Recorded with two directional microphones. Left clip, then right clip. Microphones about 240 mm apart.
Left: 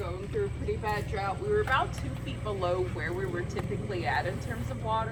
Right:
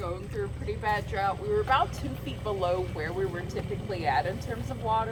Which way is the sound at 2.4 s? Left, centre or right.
Right.